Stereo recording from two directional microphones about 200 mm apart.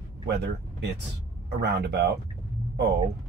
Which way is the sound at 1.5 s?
55° right (ahead or behind).